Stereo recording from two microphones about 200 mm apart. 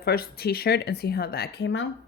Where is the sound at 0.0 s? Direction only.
50° left (ahead or behind).